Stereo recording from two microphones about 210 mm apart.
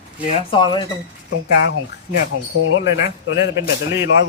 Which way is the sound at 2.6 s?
65° left (ahead or behind).